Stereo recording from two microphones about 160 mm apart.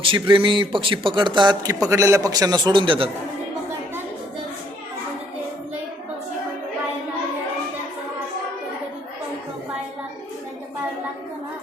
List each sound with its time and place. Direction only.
0.0 s speech: 35° right (ahead or behind)